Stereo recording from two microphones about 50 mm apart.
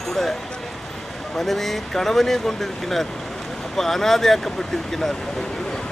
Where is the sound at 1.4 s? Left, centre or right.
Centre.